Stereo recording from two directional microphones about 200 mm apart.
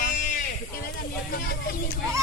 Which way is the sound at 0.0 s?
40° left (ahead or behind).